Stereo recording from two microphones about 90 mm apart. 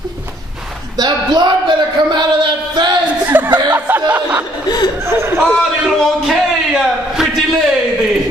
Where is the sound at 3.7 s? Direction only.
25° right (ahead or behind).